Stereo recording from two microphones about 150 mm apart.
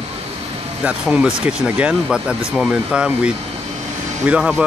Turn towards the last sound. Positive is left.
turn(degrees=-5)  # may be behind; listen again after turning